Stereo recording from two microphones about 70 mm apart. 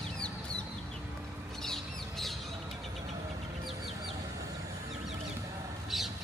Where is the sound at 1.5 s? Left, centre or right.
Centre.